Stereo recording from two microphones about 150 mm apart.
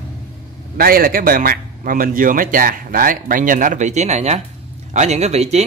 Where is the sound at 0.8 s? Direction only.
80° right.